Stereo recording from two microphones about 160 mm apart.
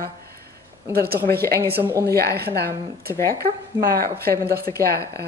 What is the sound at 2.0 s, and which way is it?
Speech, 85° right.